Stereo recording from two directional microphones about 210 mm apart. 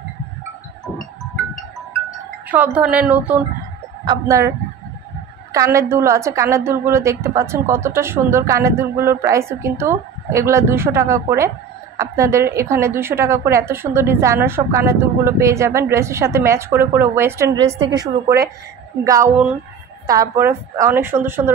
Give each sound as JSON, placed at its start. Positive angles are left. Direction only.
{"t": 2.4, "sound": "a woman's voice", "side_deg": -10}